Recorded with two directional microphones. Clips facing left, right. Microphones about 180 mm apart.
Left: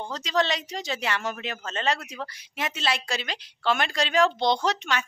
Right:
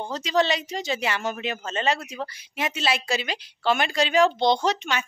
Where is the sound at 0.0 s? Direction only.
5° right (ahead or behind).